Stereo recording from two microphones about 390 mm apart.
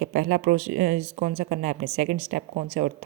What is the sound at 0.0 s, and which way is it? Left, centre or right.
A woman's voice, right.